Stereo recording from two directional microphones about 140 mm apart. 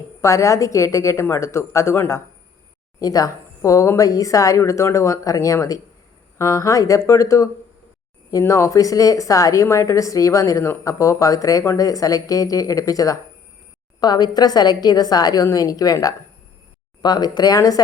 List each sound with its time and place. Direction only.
0.2 s a woman's voice: 20° left (ahead or behind)